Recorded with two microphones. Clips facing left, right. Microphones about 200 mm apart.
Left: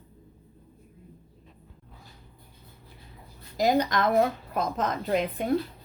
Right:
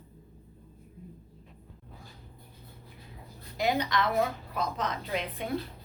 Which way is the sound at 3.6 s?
45° left (ahead or behind).